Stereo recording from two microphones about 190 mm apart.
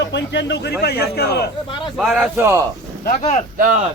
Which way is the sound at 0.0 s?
70° left (ahead or behind).